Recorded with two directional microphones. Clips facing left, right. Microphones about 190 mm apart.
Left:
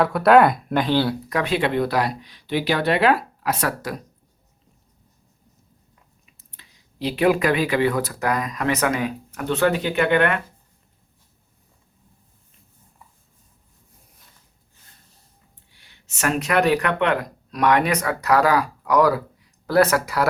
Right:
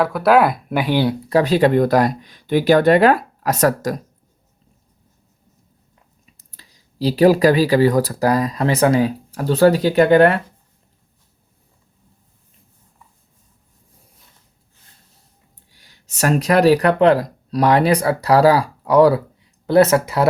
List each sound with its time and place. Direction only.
0.0 s speech: centre (ahead or behind)
1.3 s speech: 35° right (ahead or behind)
6.3 s speech: 35° right (ahead or behind)
15.7 s speech: 40° right (ahead or behind)